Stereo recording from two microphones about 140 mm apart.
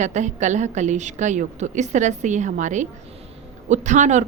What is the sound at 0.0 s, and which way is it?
A woman's voice, 60° right (ahead or behind).